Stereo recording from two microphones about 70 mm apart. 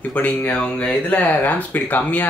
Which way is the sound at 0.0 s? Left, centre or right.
Left.